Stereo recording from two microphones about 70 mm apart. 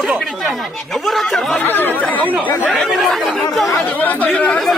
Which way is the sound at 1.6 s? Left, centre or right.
Left.